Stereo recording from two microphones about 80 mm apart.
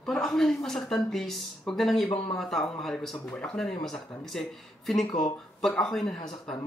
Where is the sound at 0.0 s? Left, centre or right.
Centre.